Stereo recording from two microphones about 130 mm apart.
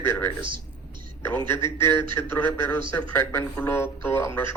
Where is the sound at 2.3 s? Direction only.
15° left (ahead or behind).